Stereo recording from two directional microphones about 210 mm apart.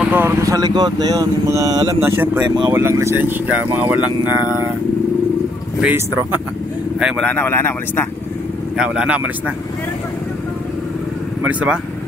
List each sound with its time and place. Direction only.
0.0 s speech: 10° right (ahead or behind)
5.8 s speech: 5° right (ahead or behind); by 8.1 s 10° left (ahead or behind)
8.7 s speech: 5° right (ahead or behind)
11.4 s speech: 5° right (ahead or behind)